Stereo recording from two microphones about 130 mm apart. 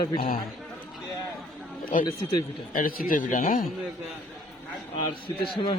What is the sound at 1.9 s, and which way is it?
A man's voice, 80° left.